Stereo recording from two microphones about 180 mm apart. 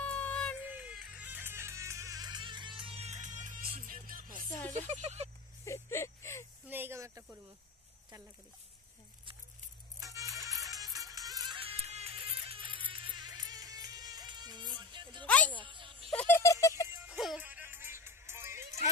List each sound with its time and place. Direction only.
0.0 s a sound: 10° left (ahead or behind)
0.6 s music: 10° right (ahead or behind); by 4.5 s 50° right (ahead or behind)
4.7 s speech: 35° right (ahead or behind)
5.7 s a sound: 15° left (ahead or behind)
6.7 s snake: 15° right (ahead or behind)
9.9 s music: 20° right (ahead or behind)
15.2 s music: 10° left (ahead or behind)
15.6 s music: 30° right (ahead or behind)
16.1 s a sound: 10° left (ahead or behind)
17.2 s music: 5° right (ahead or behind)